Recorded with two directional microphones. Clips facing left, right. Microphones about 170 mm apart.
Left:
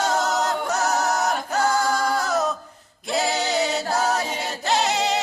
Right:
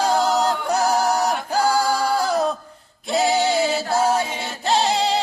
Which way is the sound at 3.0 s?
Centre (ahead or behind).